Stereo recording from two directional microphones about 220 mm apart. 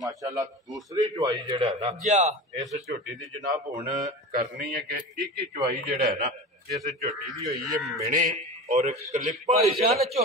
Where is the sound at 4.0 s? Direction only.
35° right (ahead or behind).